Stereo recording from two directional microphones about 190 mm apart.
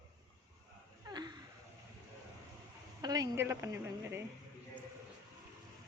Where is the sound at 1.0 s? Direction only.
20° right (ahead or behind).